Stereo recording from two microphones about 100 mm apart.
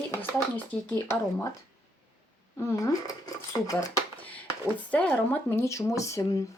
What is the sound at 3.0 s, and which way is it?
Speech, 35° left (ahead or behind).